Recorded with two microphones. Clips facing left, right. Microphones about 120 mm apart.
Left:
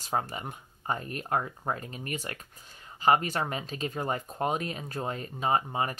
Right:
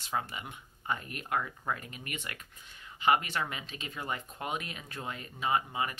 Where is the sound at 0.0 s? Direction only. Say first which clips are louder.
Left 4 dB; 40° left (ahead or behind).